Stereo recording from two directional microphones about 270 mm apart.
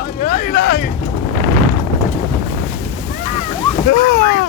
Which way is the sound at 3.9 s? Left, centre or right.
Left.